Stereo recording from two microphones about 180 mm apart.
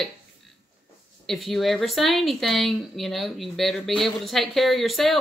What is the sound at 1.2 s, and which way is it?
A woman's voice, centre (ahead or behind).